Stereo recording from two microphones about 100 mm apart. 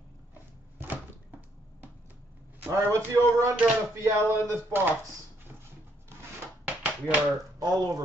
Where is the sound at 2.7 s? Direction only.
30° right (ahead or behind).